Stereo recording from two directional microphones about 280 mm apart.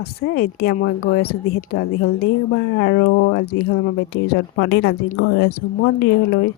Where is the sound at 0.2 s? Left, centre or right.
Left.